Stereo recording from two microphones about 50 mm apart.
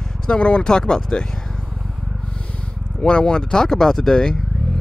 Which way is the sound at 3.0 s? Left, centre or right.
Centre.